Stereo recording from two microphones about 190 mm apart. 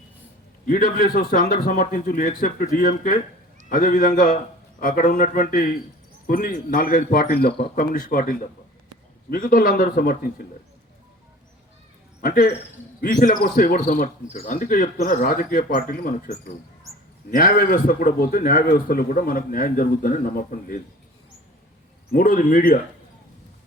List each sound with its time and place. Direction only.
0.7 s speech: 50° left (ahead or behind)
12.2 s speech: 50° left (ahead or behind)
22.1 s speech: 50° left (ahead or behind)